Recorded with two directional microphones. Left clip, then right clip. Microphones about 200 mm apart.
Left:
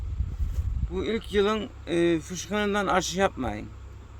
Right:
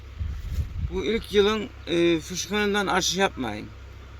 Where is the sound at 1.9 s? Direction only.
35° left (ahead or behind).